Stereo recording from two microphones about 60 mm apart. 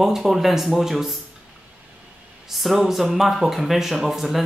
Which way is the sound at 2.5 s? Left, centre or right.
Centre.